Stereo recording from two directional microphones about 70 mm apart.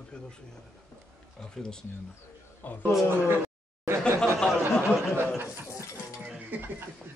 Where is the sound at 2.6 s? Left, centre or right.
Left.